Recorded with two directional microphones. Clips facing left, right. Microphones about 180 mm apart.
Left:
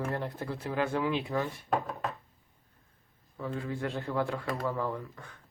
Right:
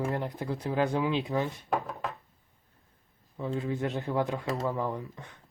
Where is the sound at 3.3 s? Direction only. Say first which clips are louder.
Right 4 dB; 20° right (ahead or behind).